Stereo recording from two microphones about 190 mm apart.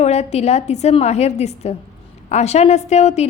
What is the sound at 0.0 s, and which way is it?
A woman's voice, 35° left (ahead or behind).